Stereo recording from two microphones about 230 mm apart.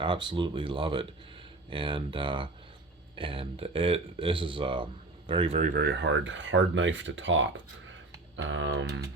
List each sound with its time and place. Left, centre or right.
0.0 s speech: right